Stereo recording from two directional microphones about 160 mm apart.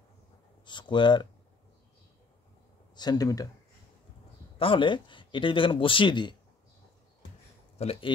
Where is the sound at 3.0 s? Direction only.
25° left (ahead or behind).